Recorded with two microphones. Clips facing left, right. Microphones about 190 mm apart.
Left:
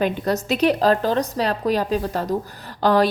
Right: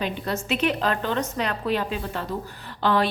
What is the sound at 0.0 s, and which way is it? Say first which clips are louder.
A woman's voice: left 6 dB; 40° left (ahead or behind).